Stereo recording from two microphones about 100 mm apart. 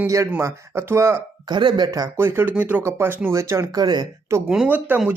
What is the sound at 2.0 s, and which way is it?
Speech, 25° right (ahead or behind).